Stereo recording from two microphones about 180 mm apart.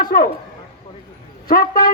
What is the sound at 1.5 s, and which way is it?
Speech, 55° left (ahead or behind).